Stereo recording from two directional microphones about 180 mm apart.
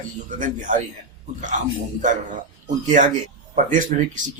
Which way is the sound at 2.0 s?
45° right (ahead or behind).